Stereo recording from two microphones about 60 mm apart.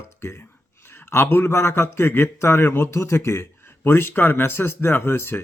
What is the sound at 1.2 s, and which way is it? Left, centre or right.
A man's voice, left.